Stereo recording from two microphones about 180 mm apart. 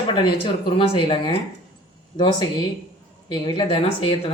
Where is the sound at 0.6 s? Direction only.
30° left (ahead or behind).